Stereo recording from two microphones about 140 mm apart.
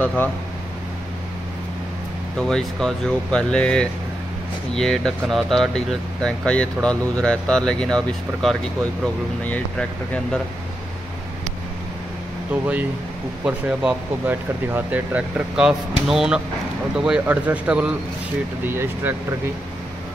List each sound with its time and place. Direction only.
0.0 s speech: 10° left (ahead or behind)
2.3 s speech: 5° left (ahead or behind)
13.5 s speech: 10° right (ahead or behind)